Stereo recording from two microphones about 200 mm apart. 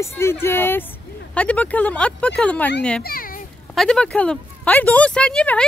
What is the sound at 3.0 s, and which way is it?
Children playing, 45° left (ahead or behind).